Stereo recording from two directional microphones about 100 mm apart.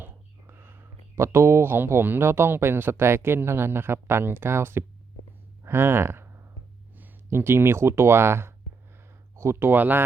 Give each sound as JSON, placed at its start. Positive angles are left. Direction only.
{"t": 0.0, "sound": "speech", "side_deg": -20}